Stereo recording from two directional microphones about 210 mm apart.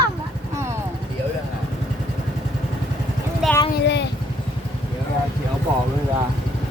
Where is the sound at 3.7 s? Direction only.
55° left (ahead or behind).